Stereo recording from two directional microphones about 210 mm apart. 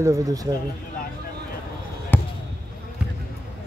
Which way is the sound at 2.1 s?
10° left (ahead or behind).